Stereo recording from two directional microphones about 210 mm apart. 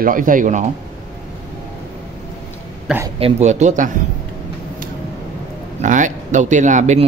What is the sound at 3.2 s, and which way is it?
Speech, 30° right (ahead or behind).